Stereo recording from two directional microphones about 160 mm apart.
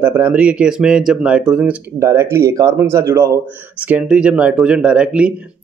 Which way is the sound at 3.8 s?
10° right (ahead or behind).